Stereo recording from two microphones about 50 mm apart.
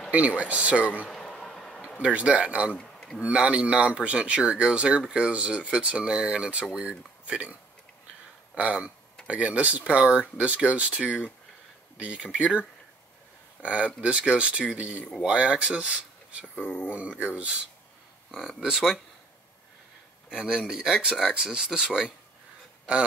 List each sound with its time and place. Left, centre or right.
0.1 s speech: right
1.1 s a sound: centre
2.0 s speech: right
8.5 s speech: right
11.0 s speech: centre
18.6 s speech: centre
20.2 s speech: centre